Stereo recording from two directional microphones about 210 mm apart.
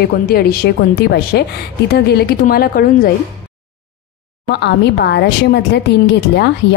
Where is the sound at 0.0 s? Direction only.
45° left (ahead or behind).